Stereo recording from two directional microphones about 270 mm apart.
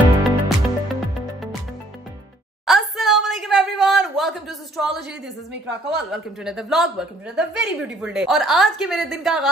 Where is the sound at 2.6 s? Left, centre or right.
Centre.